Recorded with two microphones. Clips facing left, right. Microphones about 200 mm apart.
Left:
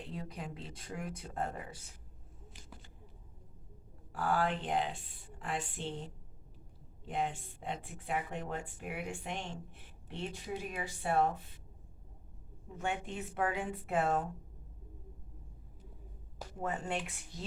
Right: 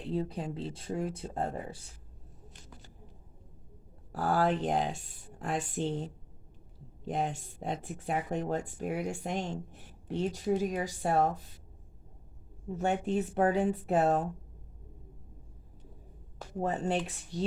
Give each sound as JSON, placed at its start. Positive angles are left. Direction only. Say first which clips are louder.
{"t": 0.1, "sound": "speech", "louder": "right 13 dB", "side_deg": -30}
{"t": 4.1, "sound": "speech", "louder": "right 5 dB", "side_deg": -40}
{"t": 7.0, "sound": "speech", "louder": "right 3 dB", "side_deg": -40}
{"t": 12.6, "sound": "speech", "louder": "right 8 dB", "side_deg": -40}
{"t": 16.6, "sound": "speech", "louder": "right 6 dB", "side_deg": -35}